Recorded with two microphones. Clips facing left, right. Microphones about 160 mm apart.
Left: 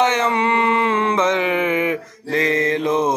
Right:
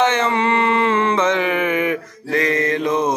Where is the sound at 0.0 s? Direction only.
15° left (ahead or behind).